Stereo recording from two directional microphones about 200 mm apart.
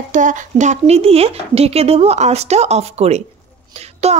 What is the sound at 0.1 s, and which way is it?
A woman's voice, 40° right (ahead or behind).